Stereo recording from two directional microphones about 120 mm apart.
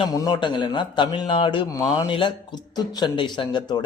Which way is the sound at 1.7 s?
30° left (ahead or behind).